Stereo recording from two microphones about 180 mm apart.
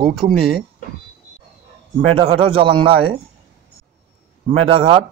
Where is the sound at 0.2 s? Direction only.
40° right (ahead or behind).